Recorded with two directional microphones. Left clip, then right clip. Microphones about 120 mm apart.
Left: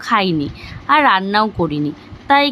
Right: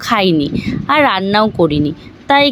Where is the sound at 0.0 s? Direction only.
40° right (ahead or behind).